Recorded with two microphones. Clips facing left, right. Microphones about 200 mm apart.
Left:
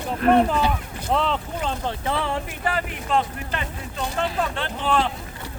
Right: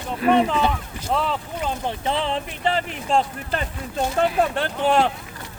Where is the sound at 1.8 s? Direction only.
20° right (ahead or behind).